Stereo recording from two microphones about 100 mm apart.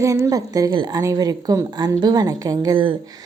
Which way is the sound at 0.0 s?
30° right (ahead or behind).